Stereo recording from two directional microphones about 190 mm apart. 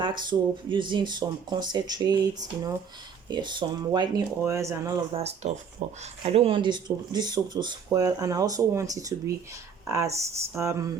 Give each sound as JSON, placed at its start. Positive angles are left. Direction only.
{"t": 0.0, "sound": "speech", "side_deg": -25}
{"t": 5.1, "sound": "speech", "side_deg": -35}